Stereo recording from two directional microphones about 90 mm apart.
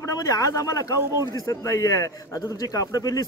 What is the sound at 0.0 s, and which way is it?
A man's voice, 40° left (ahead or behind).